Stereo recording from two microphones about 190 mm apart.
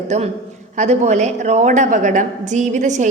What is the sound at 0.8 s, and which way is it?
A woman's voice, 40° right (ahead or behind).